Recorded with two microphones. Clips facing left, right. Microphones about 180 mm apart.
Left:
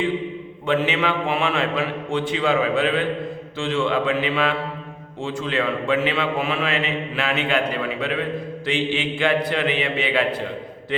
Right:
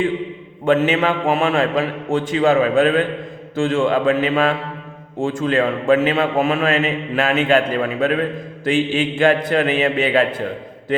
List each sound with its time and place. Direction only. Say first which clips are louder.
0.6 s a man's voice: right 5 dB; 45° right (ahead or behind)